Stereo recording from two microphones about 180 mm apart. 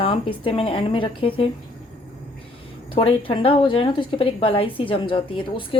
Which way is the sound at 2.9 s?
30° left (ahead or behind).